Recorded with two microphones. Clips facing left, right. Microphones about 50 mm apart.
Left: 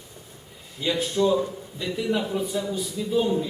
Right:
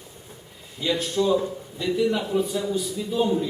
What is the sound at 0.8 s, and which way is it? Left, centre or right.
A man's voice, centre.